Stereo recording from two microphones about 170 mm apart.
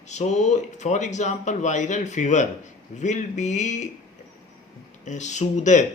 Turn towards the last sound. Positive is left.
turn(degrees=45)  # may be behind; listen again after turning